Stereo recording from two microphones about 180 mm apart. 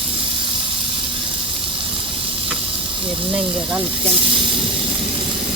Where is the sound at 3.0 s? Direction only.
30° right (ahead or behind).